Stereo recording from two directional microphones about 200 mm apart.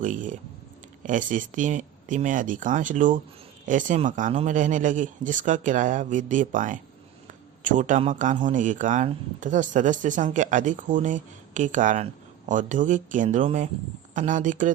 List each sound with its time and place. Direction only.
0.0 s speech: 40° right (ahead or behind)